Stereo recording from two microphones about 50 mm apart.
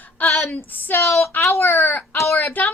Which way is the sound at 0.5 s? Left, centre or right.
Left.